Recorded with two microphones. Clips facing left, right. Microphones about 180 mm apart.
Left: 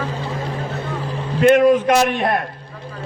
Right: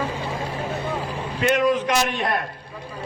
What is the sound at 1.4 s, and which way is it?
Speech, 50° left (ahead or behind).